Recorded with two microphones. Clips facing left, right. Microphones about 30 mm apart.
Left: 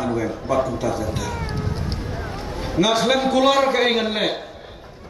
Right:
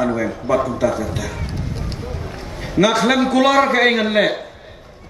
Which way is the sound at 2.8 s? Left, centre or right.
Right.